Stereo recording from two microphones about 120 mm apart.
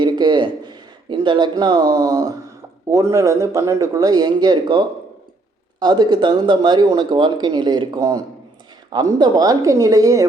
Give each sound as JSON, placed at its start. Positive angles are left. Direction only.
{"t": 0.0, "sound": "a sound", "side_deg": -35}
{"t": 2.9, "sound": "speech", "side_deg": -25}
{"t": 5.8, "sound": "speech", "side_deg": -35}